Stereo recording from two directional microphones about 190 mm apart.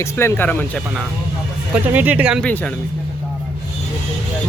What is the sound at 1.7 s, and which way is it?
Speech, 10° right (ahead or behind).